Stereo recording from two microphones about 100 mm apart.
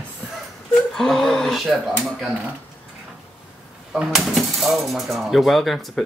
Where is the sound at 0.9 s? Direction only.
5° left (ahead or behind).